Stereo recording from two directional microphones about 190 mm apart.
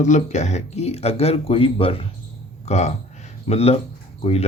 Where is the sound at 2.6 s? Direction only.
35° left (ahead or behind).